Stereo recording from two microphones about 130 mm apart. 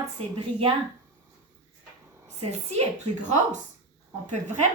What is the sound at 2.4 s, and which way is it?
Speech, 55° right (ahead or behind).